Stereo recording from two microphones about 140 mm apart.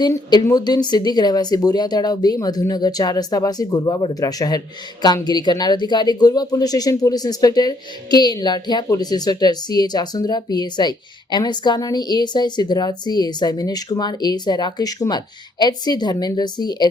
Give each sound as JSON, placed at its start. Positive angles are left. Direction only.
{"t": 0.0, "sound": "speech", "side_deg": 30}